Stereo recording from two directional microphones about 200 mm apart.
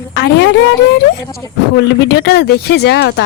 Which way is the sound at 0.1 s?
60° left (ahead or behind).